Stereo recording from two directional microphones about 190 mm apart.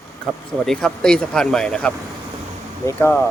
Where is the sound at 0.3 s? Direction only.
Centre (ahead or behind).